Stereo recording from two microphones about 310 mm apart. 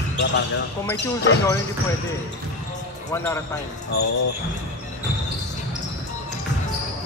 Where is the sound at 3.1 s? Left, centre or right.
Centre.